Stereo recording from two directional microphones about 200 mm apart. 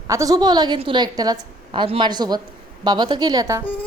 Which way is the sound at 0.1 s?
15° right (ahead or behind).